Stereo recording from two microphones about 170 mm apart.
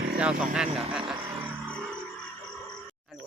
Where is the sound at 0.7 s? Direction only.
5° right (ahead or behind).